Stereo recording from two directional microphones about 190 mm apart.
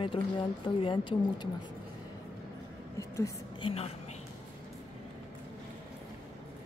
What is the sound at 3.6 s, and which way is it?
Speech, 30° left (ahead or behind).